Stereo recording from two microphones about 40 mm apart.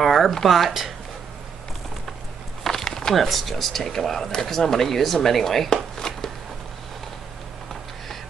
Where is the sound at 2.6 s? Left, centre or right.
Centre.